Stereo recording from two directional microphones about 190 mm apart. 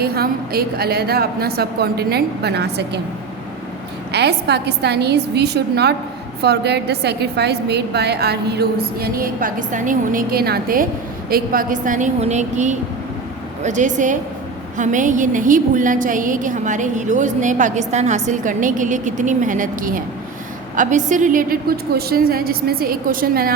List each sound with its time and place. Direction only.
0.0 s a woman's voice: 55° right (ahead or behind)
4.1 s a woman's voice: 60° right (ahead or behind)